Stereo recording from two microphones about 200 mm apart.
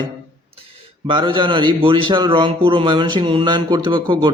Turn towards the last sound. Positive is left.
turn(degrees=-20)  # may be behind; listen again after turning